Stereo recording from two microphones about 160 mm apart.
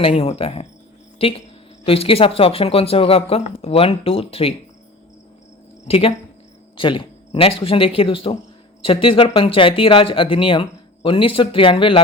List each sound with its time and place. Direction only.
0.0 s speech: 35° left (ahead or behind)
5.9 s speech: 35° left (ahead or behind)